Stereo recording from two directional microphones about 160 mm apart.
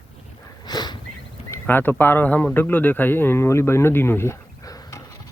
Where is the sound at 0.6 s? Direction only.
25° left (ahead or behind).